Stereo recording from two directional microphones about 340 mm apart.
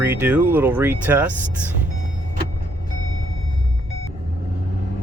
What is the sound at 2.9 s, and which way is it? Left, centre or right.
Vehicle, right.